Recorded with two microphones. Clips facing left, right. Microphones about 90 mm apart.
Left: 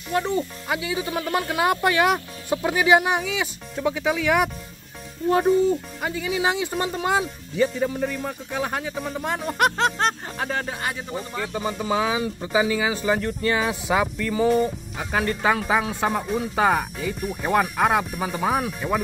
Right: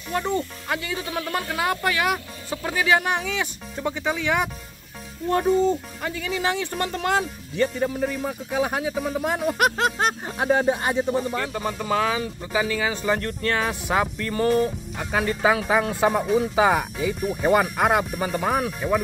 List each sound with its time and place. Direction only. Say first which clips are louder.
0.1 s speech: left 1 dB; centre (ahead or behind)
1.6 s speech: left 4 dB; 20° left (ahead or behind); by 11.1 s 25° right (ahead or behind)
11.1 s speech: right 5 dB; 5° right (ahead or behind); by 12.9 s 15° left (ahead or behind)
12.9 s speech: left 1 dB; 5° left (ahead or behind)